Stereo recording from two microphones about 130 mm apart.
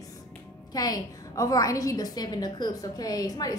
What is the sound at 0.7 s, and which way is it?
A woman's voice, 30° left (ahead or behind).